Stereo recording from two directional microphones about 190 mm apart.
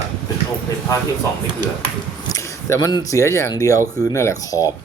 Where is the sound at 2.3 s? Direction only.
15° left (ahead or behind).